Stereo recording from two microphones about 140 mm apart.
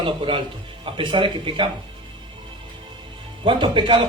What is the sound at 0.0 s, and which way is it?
A man's voice, 40° right (ahead or behind).